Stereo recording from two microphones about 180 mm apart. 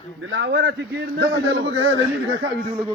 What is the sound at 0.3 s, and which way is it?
Speech, 65° right (ahead or behind).